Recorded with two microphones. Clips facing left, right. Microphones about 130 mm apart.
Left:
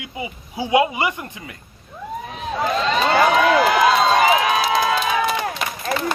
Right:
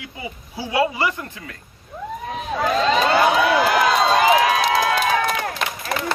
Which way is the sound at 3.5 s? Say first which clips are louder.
Left 2 dB; centre (ahead or behind).